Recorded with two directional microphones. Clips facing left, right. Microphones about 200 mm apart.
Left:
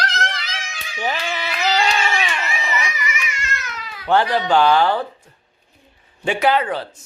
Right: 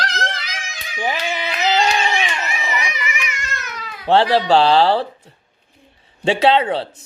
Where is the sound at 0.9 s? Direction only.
15° right (ahead or behind).